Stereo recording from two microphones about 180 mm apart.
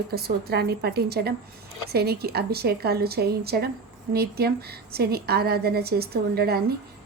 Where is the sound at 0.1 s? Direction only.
60° right (ahead or behind).